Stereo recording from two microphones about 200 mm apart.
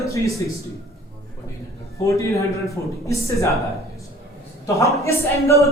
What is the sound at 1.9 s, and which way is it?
Speech, 15° left (ahead or behind).